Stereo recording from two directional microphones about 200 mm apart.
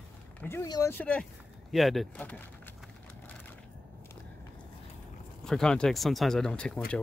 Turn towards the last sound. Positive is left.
turn(degrees=5)  # may be behind; listen again after turning